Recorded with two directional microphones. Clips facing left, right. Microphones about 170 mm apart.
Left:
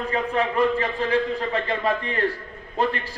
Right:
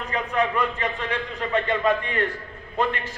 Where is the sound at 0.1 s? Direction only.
30° left (ahead or behind).